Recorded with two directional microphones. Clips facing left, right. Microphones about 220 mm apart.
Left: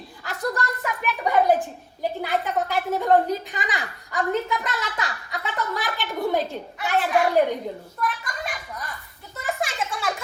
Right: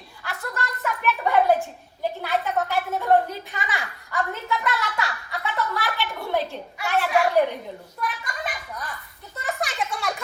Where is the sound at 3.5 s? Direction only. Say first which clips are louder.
Left 1 dB; 15° left (ahead or behind).